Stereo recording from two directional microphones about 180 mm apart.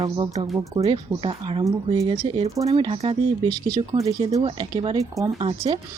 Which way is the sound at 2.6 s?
30° right (ahead or behind).